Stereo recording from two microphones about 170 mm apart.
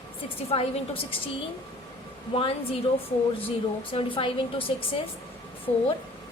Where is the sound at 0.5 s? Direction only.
35° left (ahead or behind).